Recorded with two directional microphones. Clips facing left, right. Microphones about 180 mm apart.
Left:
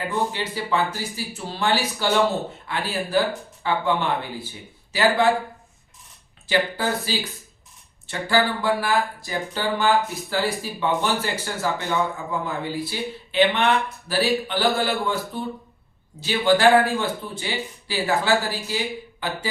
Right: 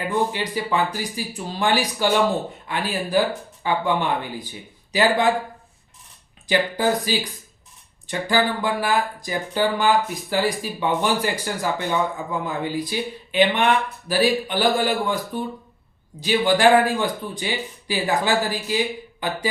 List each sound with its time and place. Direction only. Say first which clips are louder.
0.1 s speech: right 5 dB; 15° right (ahead or behind)
6.5 s speech: right 3 dB; 15° right (ahead or behind)